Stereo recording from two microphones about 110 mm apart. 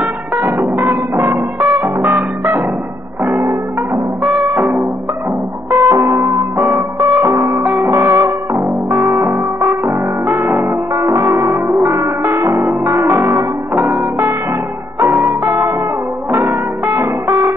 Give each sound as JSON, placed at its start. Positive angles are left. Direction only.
{"t": 0.0, "sound": "music", "side_deg": -15}
{"t": 5.7, "sound": "music", "side_deg": -30}
{"t": 7.6, "sound": "music", "side_deg": -15}
{"t": 7.9, "sound": "music", "side_deg": -25}
{"t": 13.7, "sound": "music", "side_deg": -15}
{"t": 15.0, "sound": "music", "side_deg": -25}